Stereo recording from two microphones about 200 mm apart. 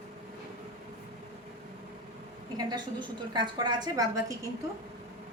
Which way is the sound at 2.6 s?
20° right (ahead or behind).